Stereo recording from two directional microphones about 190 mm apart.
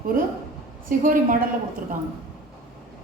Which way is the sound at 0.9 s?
45° right (ahead or behind).